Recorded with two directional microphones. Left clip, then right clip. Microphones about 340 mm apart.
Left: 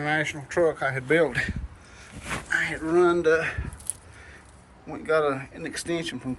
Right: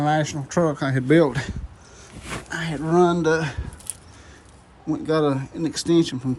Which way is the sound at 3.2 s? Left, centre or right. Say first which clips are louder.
Right 1 dB; centre.